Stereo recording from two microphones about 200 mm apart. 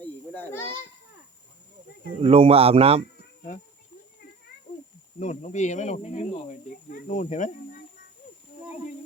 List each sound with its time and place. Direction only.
0.0 s children playing: 10° left (ahead or behind)
2.2 s speech: 30° right (ahead or behind)
5.2 s speech: 35° left (ahead or behind)